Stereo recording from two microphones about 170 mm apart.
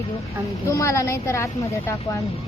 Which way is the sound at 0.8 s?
20° left (ahead or behind).